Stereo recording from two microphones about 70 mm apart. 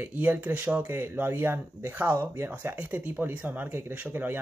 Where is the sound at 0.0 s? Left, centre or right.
Right.